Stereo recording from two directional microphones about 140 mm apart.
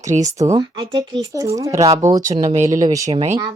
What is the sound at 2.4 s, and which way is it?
Speech, 65° right (ahead or behind).